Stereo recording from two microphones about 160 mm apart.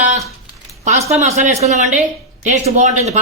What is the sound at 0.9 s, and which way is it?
Speech, 45° right (ahead or behind).